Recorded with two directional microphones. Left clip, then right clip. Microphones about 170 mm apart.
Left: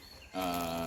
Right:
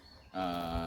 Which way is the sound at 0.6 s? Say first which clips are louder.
Left 1 dB; 15° right (ahead or behind).